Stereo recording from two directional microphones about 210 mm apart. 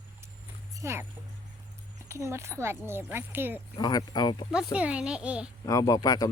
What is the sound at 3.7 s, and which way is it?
Speech, 20° left (ahead or behind).